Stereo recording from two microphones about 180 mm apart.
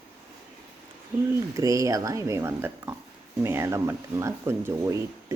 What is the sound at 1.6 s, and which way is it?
Speech, 20° right (ahead or behind).